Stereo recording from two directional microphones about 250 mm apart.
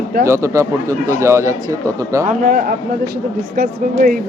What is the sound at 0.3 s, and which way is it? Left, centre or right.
Speech, centre.